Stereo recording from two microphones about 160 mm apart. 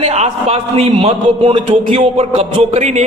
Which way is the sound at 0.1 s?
40° right (ahead or behind).